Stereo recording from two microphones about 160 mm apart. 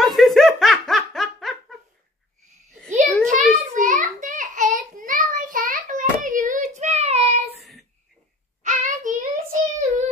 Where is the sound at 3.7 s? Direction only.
55° right (ahead or behind).